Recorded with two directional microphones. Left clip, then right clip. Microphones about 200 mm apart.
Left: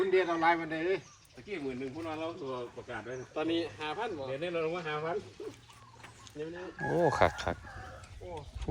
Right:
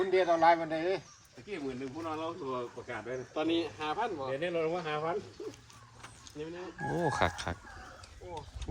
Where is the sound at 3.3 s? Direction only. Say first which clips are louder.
Right 1 dB; 30° right (ahead or behind).